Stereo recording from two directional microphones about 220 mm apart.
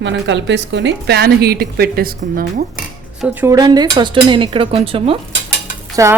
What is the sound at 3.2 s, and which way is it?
Dishes, 10° right (ahead or behind).